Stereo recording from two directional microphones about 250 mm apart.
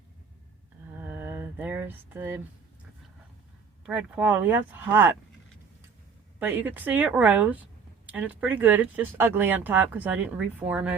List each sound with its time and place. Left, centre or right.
0.9 s a sound: centre
3.8 s a woman's voice: centre
6.4 s a woman's voice: centre